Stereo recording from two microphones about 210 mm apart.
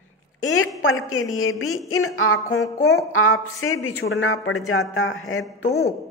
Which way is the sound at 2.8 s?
85° left.